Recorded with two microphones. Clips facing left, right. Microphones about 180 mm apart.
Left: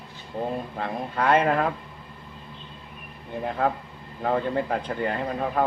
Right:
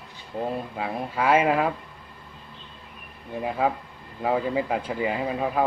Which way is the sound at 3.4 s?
5° right (ahead or behind).